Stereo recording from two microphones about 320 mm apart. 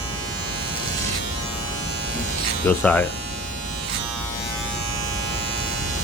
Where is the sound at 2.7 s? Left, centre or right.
Centre.